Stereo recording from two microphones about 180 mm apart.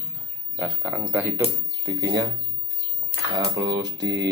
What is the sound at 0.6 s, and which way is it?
Speech, 5° right (ahead or behind).